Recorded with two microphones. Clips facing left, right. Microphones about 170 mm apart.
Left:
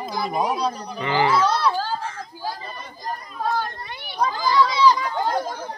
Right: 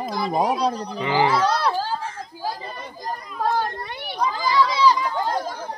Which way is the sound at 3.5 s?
45° right (ahead or behind).